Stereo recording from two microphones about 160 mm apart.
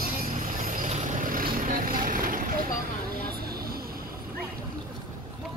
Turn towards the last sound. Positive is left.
turn(degrees=-70)  # may be behind; listen again after turning